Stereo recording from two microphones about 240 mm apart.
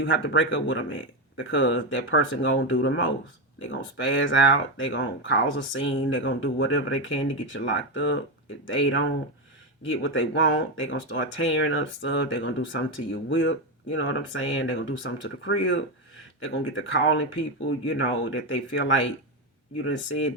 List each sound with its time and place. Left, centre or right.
0.0 s speech: left